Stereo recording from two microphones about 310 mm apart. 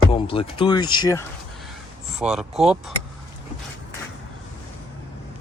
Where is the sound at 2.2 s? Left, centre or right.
Centre.